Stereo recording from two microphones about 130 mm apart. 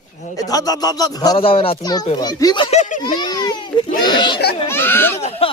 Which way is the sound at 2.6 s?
60° left (ahead or behind).